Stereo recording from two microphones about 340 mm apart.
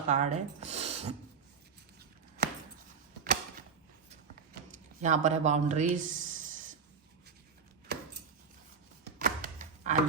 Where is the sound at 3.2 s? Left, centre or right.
Right.